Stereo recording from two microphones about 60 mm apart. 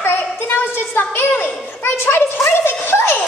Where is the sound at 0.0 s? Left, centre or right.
Left.